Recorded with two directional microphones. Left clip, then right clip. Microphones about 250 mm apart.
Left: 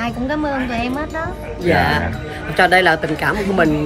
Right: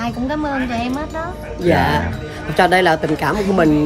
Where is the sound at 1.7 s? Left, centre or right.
Right.